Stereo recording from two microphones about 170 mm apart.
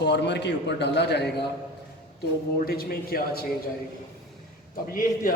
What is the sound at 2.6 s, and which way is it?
Speech, 65° left (ahead or behind).